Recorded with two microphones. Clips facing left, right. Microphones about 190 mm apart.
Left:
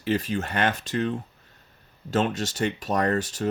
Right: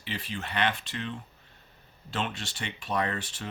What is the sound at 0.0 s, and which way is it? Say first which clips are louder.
Speech: left 11 dB; 45° left (ahead or behind).